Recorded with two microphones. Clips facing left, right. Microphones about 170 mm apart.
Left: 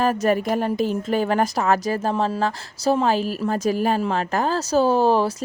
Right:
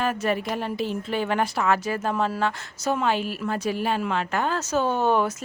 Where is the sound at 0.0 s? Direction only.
40° left (ahead or behind).